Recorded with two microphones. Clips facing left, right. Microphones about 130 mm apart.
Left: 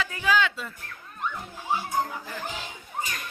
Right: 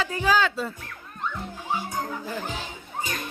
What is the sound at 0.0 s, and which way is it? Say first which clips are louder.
Speech: right 2 dB; 35° right (ahead or behind).